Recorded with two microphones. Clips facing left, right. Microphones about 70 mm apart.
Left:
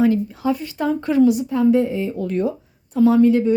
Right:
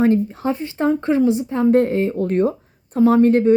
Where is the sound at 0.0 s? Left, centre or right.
Right.